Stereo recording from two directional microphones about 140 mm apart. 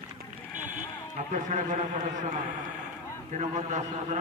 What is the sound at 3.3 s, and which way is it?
Speech, 55° right (ahead or behind).